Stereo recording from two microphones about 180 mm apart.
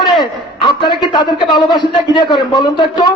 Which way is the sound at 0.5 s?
25° left (ahead or behind).